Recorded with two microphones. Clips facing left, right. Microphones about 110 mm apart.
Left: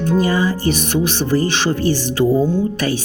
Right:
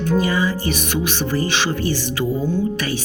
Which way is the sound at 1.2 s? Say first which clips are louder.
Left 3 dB; 30° left (ahead or behind).